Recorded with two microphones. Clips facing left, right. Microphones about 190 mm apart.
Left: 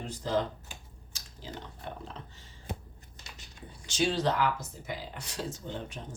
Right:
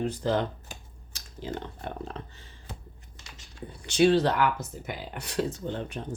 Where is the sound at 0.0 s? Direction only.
60° right (ahead or behind).